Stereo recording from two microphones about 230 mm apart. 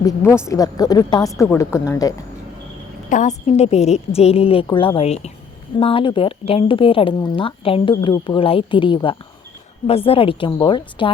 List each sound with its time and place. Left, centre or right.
0.0 s a woman's voice: centre
3.1 s speech: left